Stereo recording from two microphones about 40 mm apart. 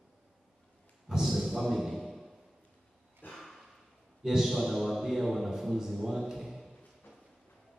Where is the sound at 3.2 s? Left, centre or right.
Left.